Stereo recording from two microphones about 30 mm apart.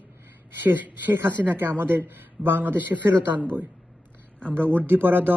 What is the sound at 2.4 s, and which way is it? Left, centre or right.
Speech, right.